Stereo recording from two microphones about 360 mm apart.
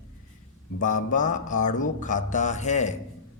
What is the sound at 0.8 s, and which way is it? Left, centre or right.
Mantra, left.